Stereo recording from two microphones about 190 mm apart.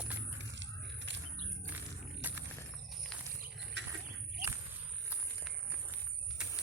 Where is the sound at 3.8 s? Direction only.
65° right (ahead or behind).